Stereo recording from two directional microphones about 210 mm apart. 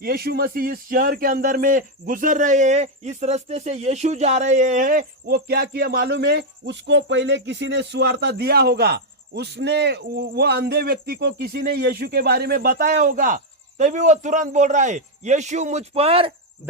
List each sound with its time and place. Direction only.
0.0 s speech: 45° right (ahead or behind); by 16.3 s 25° right (ahead or behind)